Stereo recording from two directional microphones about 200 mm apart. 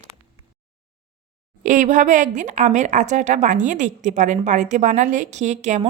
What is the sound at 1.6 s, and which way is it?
Speech, 40° right (ahead or behind).